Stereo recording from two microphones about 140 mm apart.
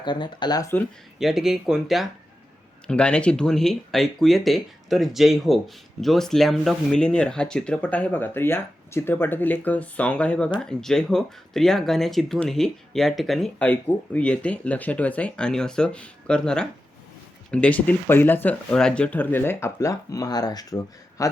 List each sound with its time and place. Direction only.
0.0 s speech: 35° left (ahead or behind)
1.2 s speech: 5° right (ahead or behind)
2.8 s speech: 10° left (ahead or behind); by 21.2 s 25° left (ahead or behind)